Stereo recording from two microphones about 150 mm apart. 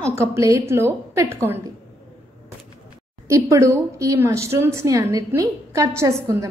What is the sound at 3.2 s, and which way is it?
A woman's voice, 20° right (ahead or behind).